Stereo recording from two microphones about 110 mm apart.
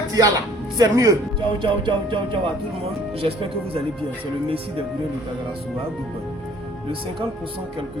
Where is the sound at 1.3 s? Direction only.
45° right (ahead or behind).